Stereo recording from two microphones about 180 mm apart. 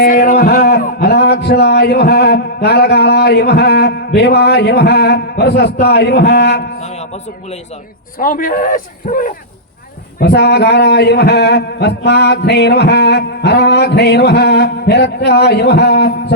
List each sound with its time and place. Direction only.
0.0 s a man's voice: 50° left (ahead or behind); by 6.7 s 70° left (ahead or behind)
6.7 s speech: 35° left (ahead or behind)
8.2 s a man's voice: 50° left (ahead or behind)
10.2 s speech: 65° left (ahead or behind)